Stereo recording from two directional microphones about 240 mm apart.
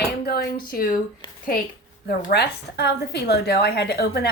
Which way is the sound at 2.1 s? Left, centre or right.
Left.